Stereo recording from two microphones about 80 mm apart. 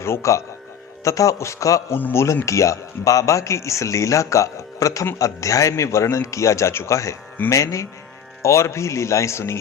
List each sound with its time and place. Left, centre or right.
0.0 s a man's voice: left
2.0 s speech: left
2.2 s speech: left